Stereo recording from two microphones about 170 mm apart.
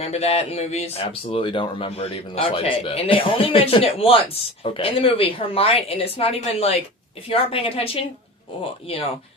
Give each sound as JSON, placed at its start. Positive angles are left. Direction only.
{"t": 0.0, "sound": "speech", "side_deg": 40}